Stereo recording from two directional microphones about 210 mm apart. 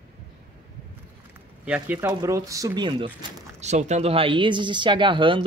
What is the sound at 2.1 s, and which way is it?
Speech, 15° right (ahead or behind).